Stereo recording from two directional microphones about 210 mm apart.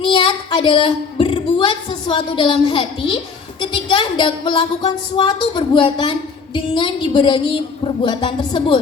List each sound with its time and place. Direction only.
0.0 s a woman's voice: 25° left (ahead or behind)